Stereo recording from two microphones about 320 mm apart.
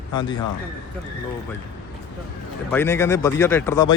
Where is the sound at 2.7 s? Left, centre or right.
Centre.